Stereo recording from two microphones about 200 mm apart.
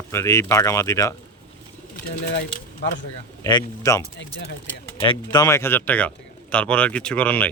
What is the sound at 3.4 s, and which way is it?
Speech, 20° left (ahead or behind).